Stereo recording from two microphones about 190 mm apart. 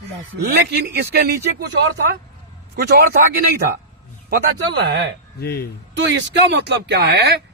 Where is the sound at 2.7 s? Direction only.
55° right (ahead or behind).